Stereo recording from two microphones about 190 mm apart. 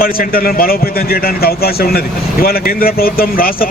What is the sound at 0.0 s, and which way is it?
Speech, 50° left (ahead or behind).